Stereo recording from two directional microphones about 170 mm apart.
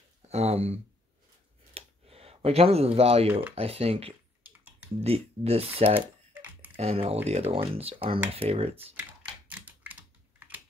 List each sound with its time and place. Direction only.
0.3 s speech: 40° right (ahead or behind)
1.7 s a sound: 35° right (ahead or behind)
3.5 s speech: 35° right (ahead or behind)
5.9 s typing: 10° right (ahead or behind)
6.8 s speech: 35° right (ahead or behind)
9.5 s typing: 10° right (ahead or behind)